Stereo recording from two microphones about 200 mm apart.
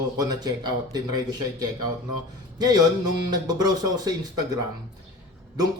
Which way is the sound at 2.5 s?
20° right (ahead or behind).